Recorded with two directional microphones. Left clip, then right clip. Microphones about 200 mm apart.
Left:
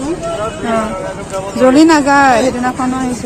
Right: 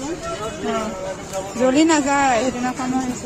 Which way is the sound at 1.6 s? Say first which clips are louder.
Left 8 dB; 5° right (ahead or behind).